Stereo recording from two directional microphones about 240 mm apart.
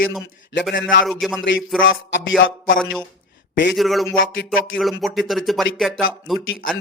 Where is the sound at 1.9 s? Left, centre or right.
Left.